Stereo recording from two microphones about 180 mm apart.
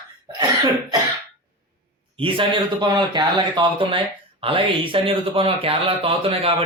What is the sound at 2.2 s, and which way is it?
Speech, 30° right (ahead or behind).